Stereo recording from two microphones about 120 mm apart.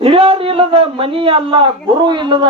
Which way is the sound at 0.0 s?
50° right (ahead or behind).